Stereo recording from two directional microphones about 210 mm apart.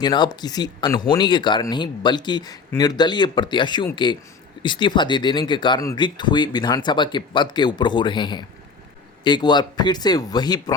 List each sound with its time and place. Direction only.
0.0 s speech: 20° left (ahead or behind)